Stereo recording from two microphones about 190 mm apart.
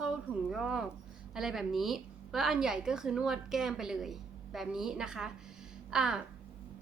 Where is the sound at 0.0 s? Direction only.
5° right (ahead or behind).